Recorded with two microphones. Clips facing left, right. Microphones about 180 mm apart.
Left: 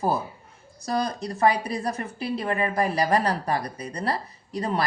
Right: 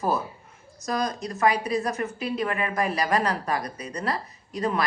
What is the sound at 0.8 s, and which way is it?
Speech, 30° left (ahead or behind).